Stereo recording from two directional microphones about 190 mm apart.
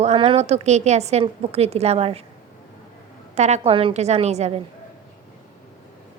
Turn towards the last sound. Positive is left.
turn(degrees=-35)  # may be behind; listen again after turning